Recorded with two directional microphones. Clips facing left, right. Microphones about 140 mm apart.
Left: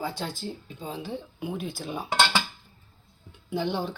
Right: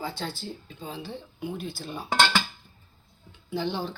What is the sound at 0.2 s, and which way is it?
A woman's voice, 5° left (ahead or behind).